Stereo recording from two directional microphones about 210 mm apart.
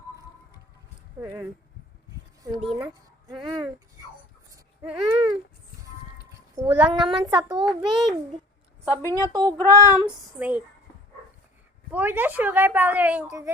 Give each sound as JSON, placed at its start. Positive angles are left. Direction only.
{"t": 1.2, "sound": "a woman's voice", "side_deg": -10}
{"t": 2.4, "sound": "speech", "side_deg": -25}
{"t": 2.7, "sound": "a woman's voice", "side_deg": -10}
{"t": 4.5, "sound": "a sound", "side_deg": -10}
{"t": 6.8, "sound": "a child's voice", "side_deg": -25}
{"t": 9.0, "sound": "a woman's voice", "side_deg": 15}
{"t": 9.3, "sound": "a woman's voice", "side_deg": -20}
{"t": 11.9, "sound": "a woman's voice", "side_deg": -10}